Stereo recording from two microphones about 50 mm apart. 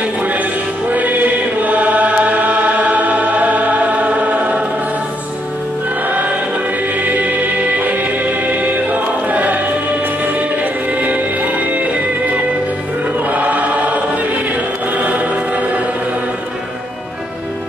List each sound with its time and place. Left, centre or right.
0.2 s chant: right
6.0 s music: right
13.3 s choir: right
15.0 s music: right